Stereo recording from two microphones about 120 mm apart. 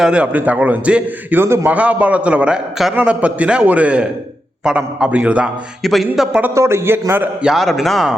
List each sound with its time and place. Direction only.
0.0 s a man's voice: 10° right (ahead or behind)
5.8 s a man's voice: centre (ahead or behind)
6.4 s a man's voice: 25° right (ahead or behind)
7.4 s a man's voice: centre (ahead or behind)